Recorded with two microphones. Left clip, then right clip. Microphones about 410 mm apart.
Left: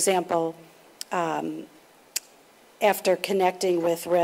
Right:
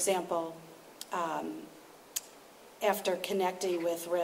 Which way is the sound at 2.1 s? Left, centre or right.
Left.